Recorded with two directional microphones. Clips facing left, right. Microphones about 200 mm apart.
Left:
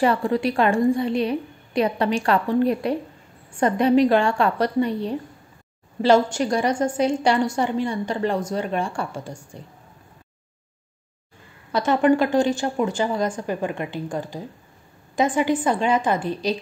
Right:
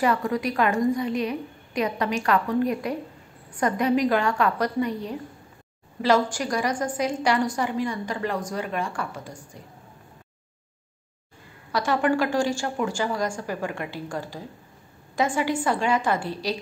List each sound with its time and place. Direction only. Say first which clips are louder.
0.0 s a woman's voice: left 4 dB; 30° left (ahead or behind)
11.7 s a woman's voice: left 5 dB; 20° left (ahead or behind)